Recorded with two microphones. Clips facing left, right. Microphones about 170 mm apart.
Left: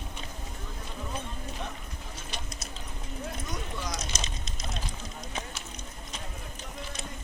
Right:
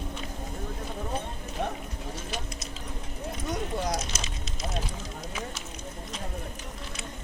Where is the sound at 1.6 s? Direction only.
55° right (ahead or behind).